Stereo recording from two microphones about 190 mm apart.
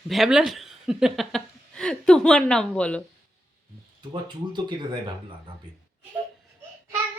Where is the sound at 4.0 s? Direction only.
25° right (ahead or behind).